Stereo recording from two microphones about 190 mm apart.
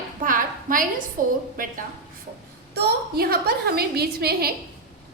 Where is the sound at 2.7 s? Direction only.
55° right (ahead or behind).